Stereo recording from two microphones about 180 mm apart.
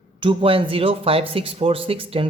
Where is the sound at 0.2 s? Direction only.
30° right (ahead or behind).